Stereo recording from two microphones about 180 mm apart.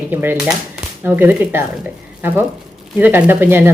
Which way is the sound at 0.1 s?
10° right (ahead or behind).